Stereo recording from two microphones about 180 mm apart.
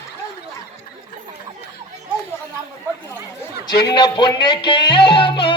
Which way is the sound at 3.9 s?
25° left (ahead or behind).